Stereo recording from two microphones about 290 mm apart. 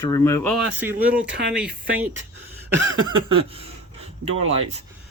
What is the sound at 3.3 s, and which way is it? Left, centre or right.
Speech, centre.